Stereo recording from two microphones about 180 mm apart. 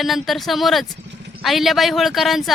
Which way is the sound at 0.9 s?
80° right.